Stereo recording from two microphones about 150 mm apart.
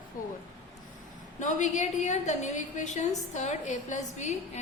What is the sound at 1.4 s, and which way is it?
A woman's voice, 55° left (ahead or behind).